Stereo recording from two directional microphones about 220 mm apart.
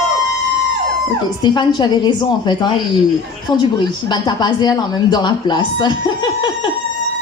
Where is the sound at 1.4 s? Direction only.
20° left (ahead or behind).